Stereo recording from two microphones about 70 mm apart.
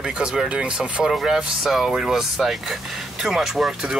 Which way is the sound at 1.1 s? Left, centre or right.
Centre.